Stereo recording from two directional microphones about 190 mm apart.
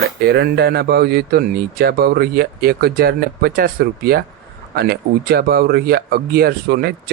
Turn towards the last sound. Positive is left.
turn(degrees=-55)  # may be behind; listen again after turning